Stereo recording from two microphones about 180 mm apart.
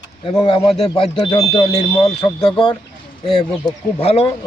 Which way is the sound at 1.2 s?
25° left (ahead or behind).